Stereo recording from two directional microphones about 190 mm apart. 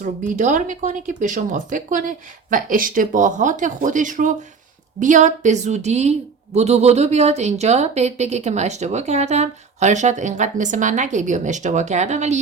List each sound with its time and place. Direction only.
0.0 s a woman's voice: 40° right (ahead or behind)